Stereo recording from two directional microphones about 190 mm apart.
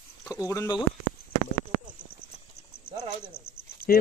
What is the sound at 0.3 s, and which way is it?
Speech, 15° left (ahead or behind).